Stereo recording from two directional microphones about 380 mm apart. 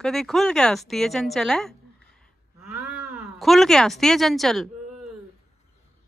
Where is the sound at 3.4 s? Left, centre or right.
Centre.